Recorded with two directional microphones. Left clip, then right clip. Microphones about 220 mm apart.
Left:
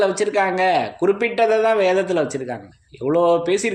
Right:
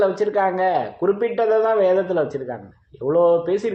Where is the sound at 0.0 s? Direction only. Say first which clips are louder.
Even; 30° left (ahead or behind).